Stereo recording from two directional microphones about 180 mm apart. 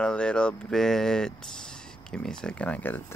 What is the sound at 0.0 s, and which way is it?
Speech, 5° left (ahead or behind).